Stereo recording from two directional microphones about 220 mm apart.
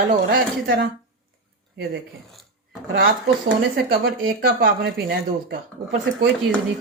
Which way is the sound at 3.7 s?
40° right (ahead or behind).